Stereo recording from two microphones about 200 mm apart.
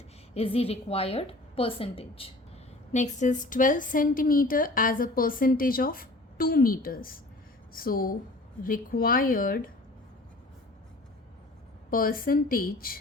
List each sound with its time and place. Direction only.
0.3 s a woman's voice: 30° left (ahead or behind); by 9.6 s 45° left (ahead or behind)
11.9 s a woman's voice: 45° left (ahead or behind)